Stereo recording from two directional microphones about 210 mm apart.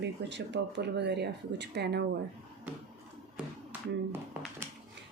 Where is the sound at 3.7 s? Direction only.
10° right (ahead or behind).